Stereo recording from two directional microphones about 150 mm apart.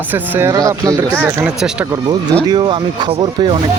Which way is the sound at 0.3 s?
20° right (ahead or behind).